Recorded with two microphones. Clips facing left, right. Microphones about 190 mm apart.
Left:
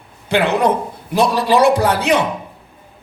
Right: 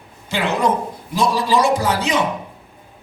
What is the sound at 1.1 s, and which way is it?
Music, 60° left (ahead or behind).